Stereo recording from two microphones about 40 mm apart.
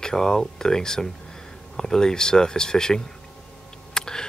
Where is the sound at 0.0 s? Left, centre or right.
Centre.